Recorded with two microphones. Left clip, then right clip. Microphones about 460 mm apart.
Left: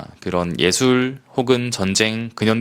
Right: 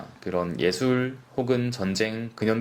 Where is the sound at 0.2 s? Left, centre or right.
Left.